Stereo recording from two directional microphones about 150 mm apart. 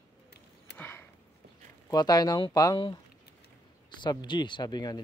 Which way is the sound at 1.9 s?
25° left (ahead or behind).